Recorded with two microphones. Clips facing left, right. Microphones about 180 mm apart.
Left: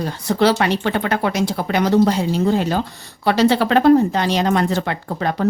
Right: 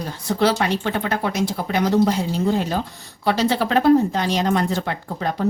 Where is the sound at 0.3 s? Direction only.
75° left (ahead or behind).